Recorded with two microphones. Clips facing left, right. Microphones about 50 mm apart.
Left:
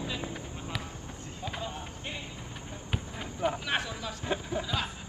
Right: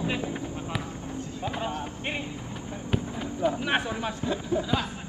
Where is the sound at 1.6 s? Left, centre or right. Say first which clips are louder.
Right 7 dB; right.